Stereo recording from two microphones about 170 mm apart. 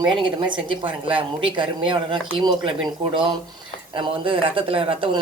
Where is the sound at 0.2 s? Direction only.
30° right (ahead or behind).